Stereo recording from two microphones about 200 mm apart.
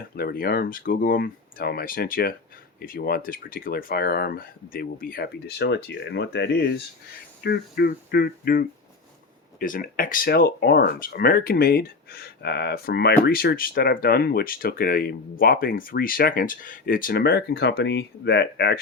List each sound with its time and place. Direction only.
0.2 s speech: 50° left (ahead or behind)